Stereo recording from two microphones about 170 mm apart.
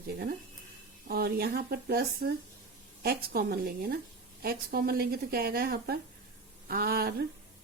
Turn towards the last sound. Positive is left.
turn(degrees=-60)  # may be behind; listen again after turning